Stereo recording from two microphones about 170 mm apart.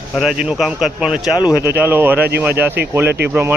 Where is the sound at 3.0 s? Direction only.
75° right (ahead or behind).